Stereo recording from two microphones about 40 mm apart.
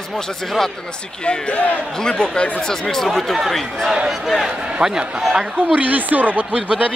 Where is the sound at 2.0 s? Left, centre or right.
Left; by 3.8 s centre.